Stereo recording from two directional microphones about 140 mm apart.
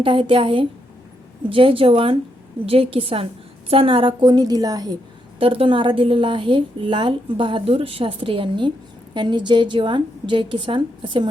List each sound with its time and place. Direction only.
0.0 s a woman's voice: 40° right (ahead or behind)
5.4 s a woman's voice: 40° right (ahead or behind)